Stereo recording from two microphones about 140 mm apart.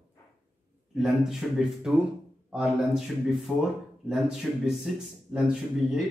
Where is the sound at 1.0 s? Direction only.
Centre (ahead or behind).